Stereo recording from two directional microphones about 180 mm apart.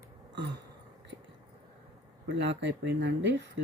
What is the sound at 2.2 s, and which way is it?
Speech, 75° right (ahead or behind).